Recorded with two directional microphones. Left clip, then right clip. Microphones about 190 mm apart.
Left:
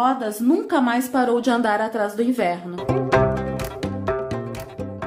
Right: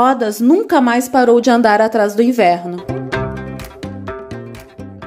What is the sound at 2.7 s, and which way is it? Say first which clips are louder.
Music: left 2 dB; centre (ahead or behind).